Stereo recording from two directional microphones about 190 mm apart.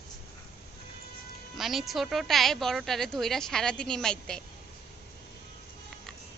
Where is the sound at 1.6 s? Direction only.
Centre (ahead or behind).